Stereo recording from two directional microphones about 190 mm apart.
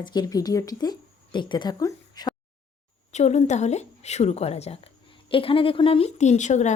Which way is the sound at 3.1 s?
35° left (ahead or behind).